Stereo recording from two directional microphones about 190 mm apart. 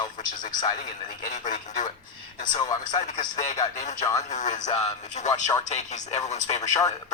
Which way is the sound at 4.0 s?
20° left (ahead or behind).